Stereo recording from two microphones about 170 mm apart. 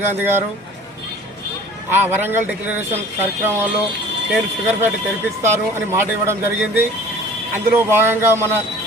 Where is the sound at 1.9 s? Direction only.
10° right (ahead or behind).